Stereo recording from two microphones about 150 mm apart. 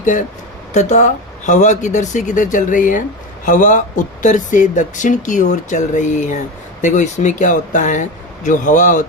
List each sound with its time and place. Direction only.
0.0 s speech: 60° left (ahead or behind)